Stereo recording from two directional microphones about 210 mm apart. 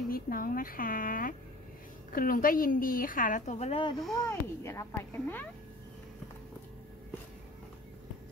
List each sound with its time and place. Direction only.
0.1 s a woman's voice: 45° left (ahead or behind)
4.0 s speech: centre (ahead or behind)
4.3 s speech: 15° left (ahead or behind)